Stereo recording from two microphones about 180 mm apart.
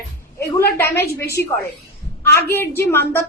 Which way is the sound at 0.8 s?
15° left (ahead or behind).